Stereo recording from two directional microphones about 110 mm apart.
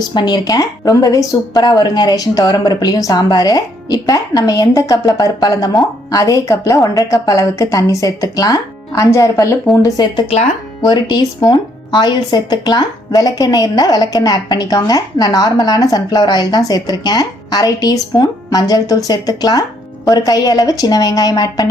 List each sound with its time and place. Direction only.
0.0 s speech: 45° left (ahead or behind)
10.2 s speech: 80° left
10.8 s speech: 40° left (ahead or behind)